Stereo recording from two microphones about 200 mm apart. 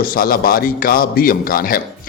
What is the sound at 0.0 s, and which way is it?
A man's voice, 45° left (ahead or behind).